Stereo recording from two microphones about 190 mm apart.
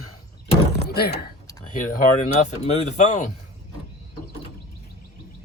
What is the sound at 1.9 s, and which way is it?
Speech, 35° left (ahead or behind).